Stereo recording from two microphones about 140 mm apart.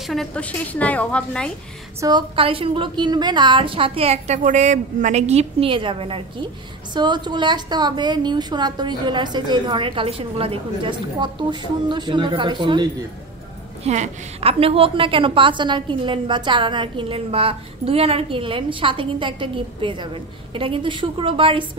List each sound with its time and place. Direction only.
0.0 s a woman's voice: centre (ahead or behind)
2.0 s a woman's voice: 30° right (ahead or behind); by 4.4 s 45° right (ahead or behind)
4.4 s a woman's voice: 60° right (ahead or behind); by 12.8 s 35° right (ahead or behind)
13.8 s a woman's voice: 55° right (ahead or behind); by 21.6 s 40° right (ahead or behind)